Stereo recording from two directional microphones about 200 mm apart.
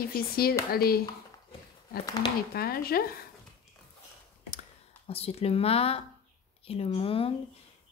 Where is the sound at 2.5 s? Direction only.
50° left (ahead or behind).